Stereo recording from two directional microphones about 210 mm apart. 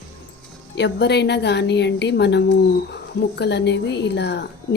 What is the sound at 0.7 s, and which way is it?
A woman's voice, 55° left (ahead or behind).